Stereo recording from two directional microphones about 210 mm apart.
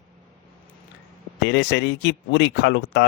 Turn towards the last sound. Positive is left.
turn(degrees=55)  # may be behind; listen again after turning